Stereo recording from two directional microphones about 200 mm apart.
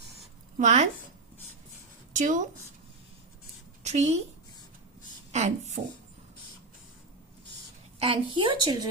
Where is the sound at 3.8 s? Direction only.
35° right (ahead or behind).